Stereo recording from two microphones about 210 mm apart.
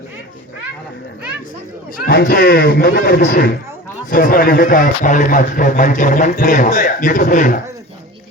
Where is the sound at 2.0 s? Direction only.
45° left (ahead or behind).